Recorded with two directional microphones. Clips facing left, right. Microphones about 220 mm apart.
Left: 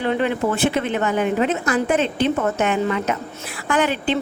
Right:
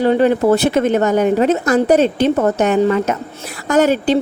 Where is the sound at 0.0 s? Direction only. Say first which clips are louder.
Right 8 dB; 40° right (ahead or behind).